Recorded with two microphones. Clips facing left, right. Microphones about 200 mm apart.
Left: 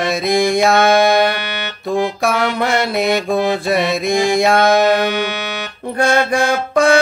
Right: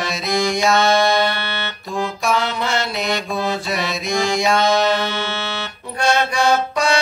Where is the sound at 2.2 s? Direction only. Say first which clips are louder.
Left 4 dB; 55° left (ahead or behind).